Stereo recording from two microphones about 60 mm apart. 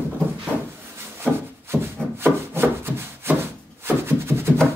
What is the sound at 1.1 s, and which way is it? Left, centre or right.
Rub, right.